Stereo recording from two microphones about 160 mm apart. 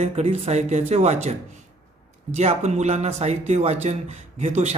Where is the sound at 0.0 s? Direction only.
40° right (ahead or behind).